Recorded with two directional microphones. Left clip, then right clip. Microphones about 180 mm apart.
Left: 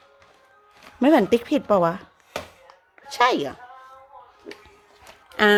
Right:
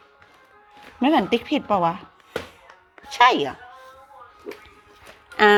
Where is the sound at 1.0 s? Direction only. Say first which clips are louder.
Left 2 dB; 50° left (ahead or behind).